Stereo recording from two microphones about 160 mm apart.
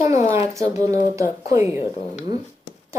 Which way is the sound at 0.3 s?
20° right (ahead or behind).